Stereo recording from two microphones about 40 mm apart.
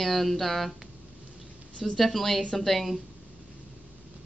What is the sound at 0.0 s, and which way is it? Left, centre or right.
Speech, centre.